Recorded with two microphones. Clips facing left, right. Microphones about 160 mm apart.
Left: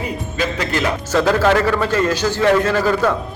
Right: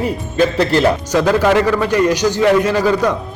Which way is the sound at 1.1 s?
15° right (ahead or behind).